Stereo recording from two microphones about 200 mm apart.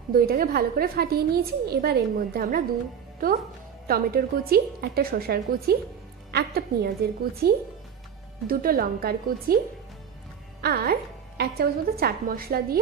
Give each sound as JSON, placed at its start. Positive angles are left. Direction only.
{"t": 0.1, "sound": "a woman's voice", "side_deg": -45}
{"t": 10.6, "sound": "a woman's voice", "side_deg": -50}